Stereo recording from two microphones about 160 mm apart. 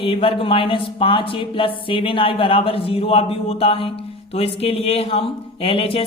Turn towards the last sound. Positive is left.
turn(degrees=35)  # may be behind; listen again after turning